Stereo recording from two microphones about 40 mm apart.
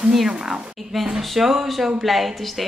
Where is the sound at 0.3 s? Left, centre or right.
Centre.